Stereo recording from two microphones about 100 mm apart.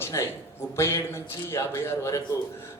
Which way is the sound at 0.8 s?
25° left (ahead or behind).